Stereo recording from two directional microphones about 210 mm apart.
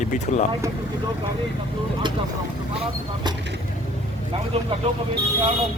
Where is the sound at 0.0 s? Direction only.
35° left (ahead or behind).